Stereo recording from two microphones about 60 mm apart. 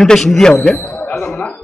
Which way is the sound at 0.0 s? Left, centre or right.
Centre.